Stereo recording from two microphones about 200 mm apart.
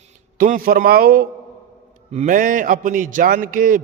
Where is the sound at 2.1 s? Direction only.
40° right (ahead or behind).